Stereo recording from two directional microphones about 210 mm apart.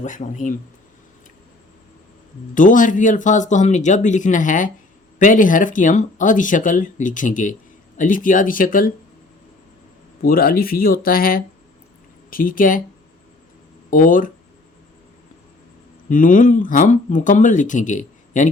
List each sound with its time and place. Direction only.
0.0 s speech: 35° left (ahead or behind)
2.6 s speech: 40° left (ahead or behind)
10.2 s speech: 45° left (ahead or behind)
13.9 s speech: 40° left (ahead or behind)
16.0 s speech: 40° left (ahead or behind)